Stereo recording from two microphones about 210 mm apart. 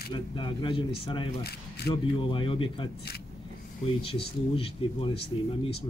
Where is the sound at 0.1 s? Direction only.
25° left (ahead or behind).